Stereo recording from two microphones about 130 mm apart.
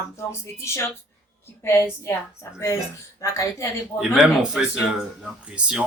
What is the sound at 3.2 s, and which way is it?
Speech, 25° left (ahead or behind).